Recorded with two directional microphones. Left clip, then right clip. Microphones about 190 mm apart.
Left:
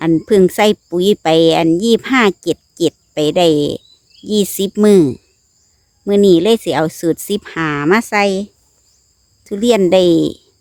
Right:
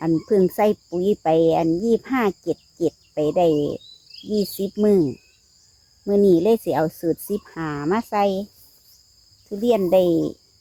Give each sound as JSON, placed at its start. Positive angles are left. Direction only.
{"t": 0.0, "sound": "speech", "side_deg": 35}
{"t": 6.1, "sound": "speech", "side_deg": 30}